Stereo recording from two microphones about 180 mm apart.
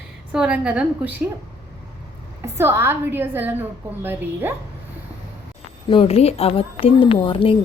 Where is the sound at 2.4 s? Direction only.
15° right (ahead or behind).